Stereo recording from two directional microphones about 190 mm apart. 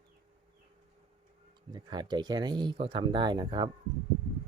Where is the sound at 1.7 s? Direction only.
20° right (ahead or behind).